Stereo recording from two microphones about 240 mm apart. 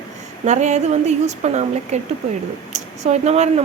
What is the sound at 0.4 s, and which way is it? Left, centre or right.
Speech, right.